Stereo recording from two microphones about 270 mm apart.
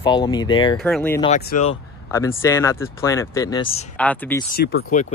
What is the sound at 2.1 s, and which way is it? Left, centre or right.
Speech, centre.